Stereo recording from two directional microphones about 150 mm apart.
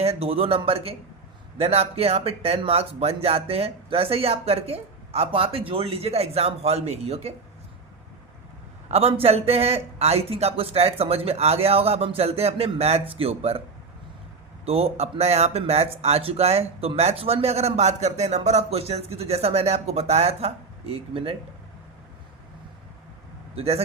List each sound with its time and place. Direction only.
0.0 s speech: 40° right (ahead or behind)
8.9 s speech: 40° right (ahead or behind)
14.6 s speech: 40° right (ahead or behind)
23.6 s speech: 40° right (ahead or behind)